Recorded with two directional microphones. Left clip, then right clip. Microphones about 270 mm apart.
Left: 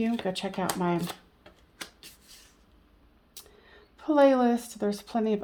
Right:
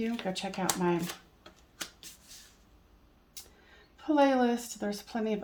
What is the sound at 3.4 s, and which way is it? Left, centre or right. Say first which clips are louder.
Vehicle: left 1 dB; left.